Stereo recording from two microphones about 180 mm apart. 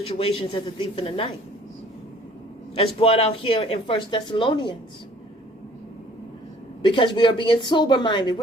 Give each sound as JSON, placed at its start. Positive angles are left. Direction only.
{"t": 0.0, "sound": "a man's voice", "side_deg": 30}
{"t": 2.7, "sound": "speech", "side_deg": 30}
{"t": 6.8, "sound": "speech", "side_deg": 25}